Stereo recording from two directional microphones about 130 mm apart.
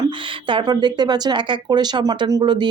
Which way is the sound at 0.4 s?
35° right (ahead or behind).